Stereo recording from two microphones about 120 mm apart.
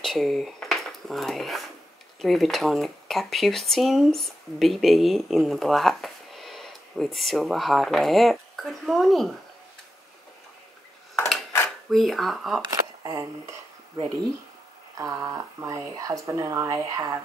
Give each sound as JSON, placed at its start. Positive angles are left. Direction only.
{"t": 0.0, "sound": "speech", "side_deg": 0}
{"t": 11.9, "sound": "speech", "side_deg": 0}
{"t": 13.0, "sound": "a sound", "side_deg": -30}
{"t": 15.0, "sound": "speech", "side_deg": -30}